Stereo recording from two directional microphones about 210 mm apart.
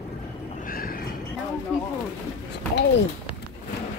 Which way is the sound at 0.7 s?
45° left (ahead or behind).